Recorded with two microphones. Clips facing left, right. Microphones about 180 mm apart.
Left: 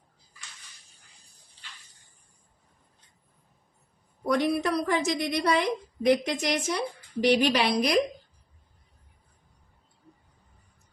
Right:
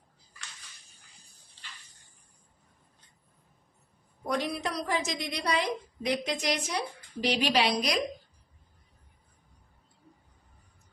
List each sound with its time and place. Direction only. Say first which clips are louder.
4.4 s a woman's voice: left 9 dB; 60° left (ahead or behind)